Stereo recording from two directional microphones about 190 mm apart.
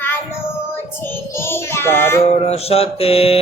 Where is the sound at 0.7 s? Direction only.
10° left (ahead or behind).